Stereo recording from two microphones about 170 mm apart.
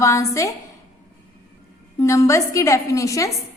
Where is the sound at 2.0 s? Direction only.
15° left (ahead or behind).